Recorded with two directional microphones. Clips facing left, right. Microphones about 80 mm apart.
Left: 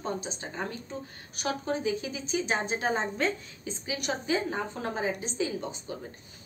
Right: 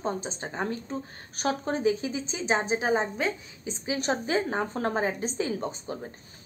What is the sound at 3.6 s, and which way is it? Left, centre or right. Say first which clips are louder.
A woman's voice: right 5 dB; right.